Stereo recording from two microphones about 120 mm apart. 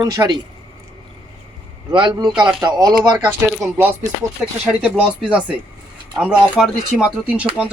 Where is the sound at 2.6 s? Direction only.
35° right (ahead or behind).